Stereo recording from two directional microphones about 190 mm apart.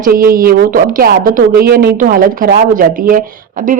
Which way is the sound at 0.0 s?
50° right (ahead or behind).